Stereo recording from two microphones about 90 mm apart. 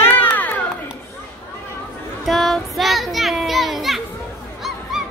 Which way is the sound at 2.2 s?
Centre (ahead or behind).